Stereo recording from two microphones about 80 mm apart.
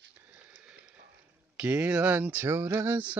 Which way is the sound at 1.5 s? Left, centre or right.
Right.